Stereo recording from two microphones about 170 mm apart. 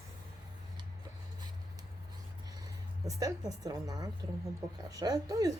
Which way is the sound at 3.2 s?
20° right (ahead or behind).